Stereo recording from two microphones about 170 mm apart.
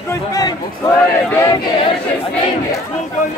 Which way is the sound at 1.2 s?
15° left (ahead or behind).